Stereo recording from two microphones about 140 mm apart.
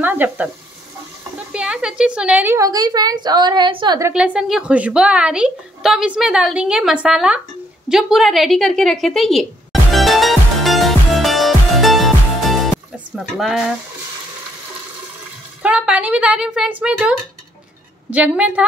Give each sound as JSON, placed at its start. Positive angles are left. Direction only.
{"t": 0.0, "sound": "a woman's voice", "side_deg": -15}
{"t": 1.5, "sound": "a woman's voice", "side_deg": -5}
{"t": 4.1, "sound": "speech", "side_deg": -5}
{"t": 7.9, "sound": "a sound", "side_deg": 0}
{"t": 13.1, "sound": "speech", "side_deg": 0}
{"t": 15.6, "sound": "a woman's voice", "side_deg": -10}
{"t": 18.1, "sound": "a woman's voice", "side_deg": -10}